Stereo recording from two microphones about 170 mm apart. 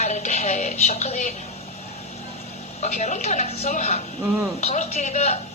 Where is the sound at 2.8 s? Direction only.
40° left (ahead or behind).